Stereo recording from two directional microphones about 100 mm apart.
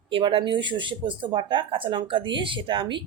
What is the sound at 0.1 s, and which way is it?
Speech, 60° right (ahead or behind).